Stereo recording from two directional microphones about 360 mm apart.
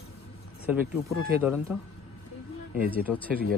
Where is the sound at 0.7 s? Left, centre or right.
Centre.